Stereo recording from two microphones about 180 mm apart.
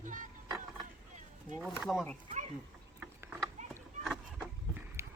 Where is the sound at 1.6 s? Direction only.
5° right (ahead or behind).